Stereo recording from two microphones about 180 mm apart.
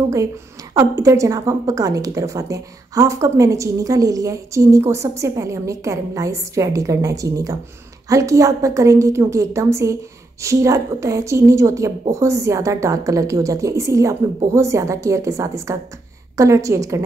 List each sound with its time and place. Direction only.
0.7 s a woman's voice: 15° right (ahead or behind)